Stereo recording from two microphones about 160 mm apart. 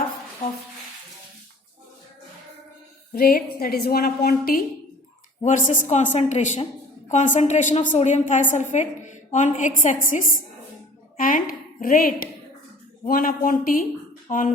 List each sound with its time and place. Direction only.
3.1 s a woman's voice: 70° left (ahead or behind)
5.4 s a woman's voice: 50° left (ahead or behind)